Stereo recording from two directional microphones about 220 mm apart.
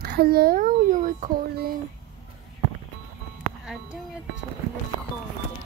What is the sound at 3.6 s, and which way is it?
Speech, 5° right (ahead or behind).